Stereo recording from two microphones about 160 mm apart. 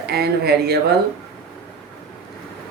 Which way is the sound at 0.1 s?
85° right.